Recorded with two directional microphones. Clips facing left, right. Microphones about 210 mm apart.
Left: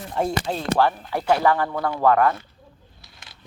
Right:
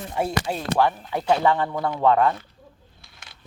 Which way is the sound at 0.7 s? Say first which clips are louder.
Even; 20° right (ahead or behind).